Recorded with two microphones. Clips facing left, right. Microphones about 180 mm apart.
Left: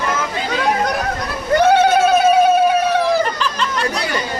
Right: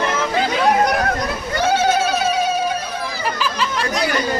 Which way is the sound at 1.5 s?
60° left (ahead or behind).